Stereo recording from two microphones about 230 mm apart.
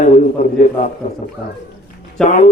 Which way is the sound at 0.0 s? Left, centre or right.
Left.